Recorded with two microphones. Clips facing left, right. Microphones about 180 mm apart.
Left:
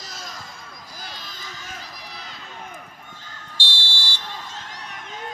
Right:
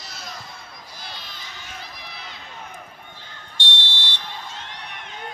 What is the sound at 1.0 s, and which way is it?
Run, 40° left (ahead or behind).